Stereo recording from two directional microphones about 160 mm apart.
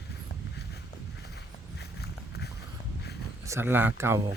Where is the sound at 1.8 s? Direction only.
90° left.